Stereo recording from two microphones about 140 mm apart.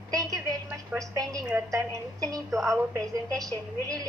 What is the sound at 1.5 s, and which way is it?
A woman's voice, 20° right (ahead or behind).